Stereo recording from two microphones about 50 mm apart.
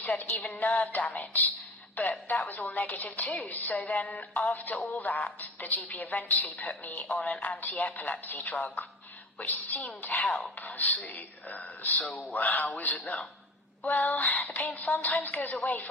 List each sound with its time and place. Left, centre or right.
0.0 s a woman's voice: left